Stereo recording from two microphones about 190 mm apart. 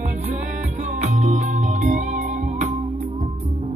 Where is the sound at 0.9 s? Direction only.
40° right (ahead or behind).